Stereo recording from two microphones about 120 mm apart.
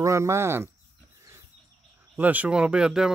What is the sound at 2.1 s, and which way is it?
Speech, 15° right (ahead or behind).